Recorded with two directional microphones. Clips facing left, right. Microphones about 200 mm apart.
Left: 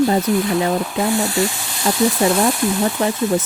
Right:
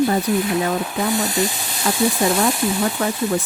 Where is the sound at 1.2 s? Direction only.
20° right (ahead or behind).